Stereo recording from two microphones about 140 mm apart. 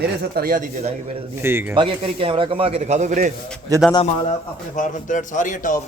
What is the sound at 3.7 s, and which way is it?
Speech, 25° right (ahead or behind).